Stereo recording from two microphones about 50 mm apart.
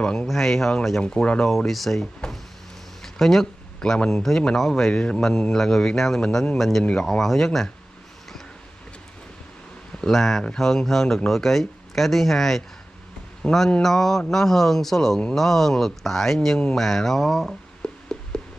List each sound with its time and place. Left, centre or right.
0.0 s speech: centre
0.3 s speech: centre
1.0 s speech: left
1.7 s speech: centre
3.0 s a sound: centre
4.1 s speech: centre
9.9 s speech: centre
17.8 s a sound: centre